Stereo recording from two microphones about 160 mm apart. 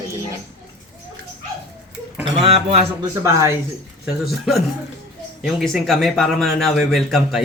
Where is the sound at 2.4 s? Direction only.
40° right (ahead or behind).